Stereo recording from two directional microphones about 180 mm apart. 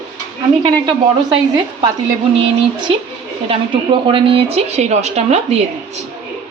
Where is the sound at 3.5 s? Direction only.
30° right (ahead or behind).